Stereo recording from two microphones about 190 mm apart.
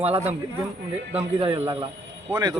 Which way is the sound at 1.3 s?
30° right (ahead or behind).